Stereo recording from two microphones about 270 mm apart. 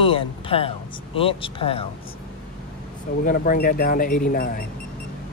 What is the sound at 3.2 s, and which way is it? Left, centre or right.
Speech, left.